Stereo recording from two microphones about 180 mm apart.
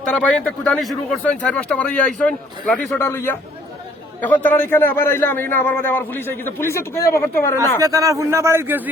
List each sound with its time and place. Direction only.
0.1 s speech: 5° left (ahead or behind)
7.8 s a man's voice: 20° right (ahead or behind)